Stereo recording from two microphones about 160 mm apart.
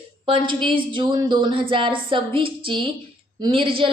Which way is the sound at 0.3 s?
30° right (ahead or behind).